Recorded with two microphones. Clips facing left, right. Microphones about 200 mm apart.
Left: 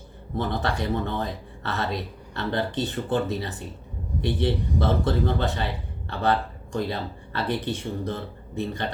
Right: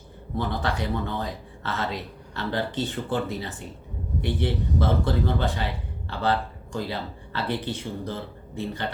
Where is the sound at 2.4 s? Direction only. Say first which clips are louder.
Left 1 dB; 20° left (ahead or behind).